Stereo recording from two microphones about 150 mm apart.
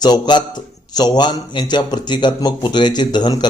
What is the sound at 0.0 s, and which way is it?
A man's voice, 30° left (ahead or behind).